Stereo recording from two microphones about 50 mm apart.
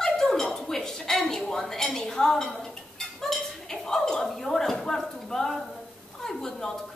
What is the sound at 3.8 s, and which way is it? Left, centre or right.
A woman's voice, centre.